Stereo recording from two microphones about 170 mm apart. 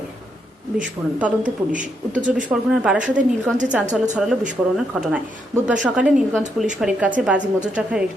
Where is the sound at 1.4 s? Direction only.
50° right (ahead or behind).